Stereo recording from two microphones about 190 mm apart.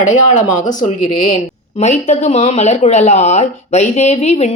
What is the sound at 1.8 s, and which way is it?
Speech, 35° left (ahead or behind).